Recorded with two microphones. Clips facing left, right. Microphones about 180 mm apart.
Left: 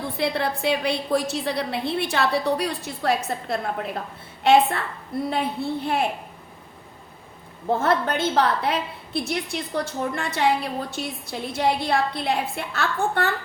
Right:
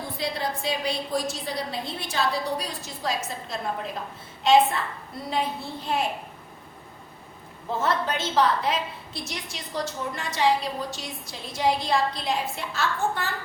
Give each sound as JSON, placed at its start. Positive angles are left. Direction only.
{"t": 0.2, "sound": "a woman's voice", "side_deg": 65}
{"t": 5.3, "sound": "a woman's voice", "side_deg": 60}
{"t": 7.7, "sound": "a woman's voice", "side_deg": 55}